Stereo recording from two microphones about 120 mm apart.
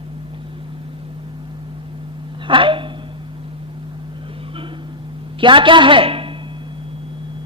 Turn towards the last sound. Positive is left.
turn(degrees=-50)  # may be behind; listen again after turning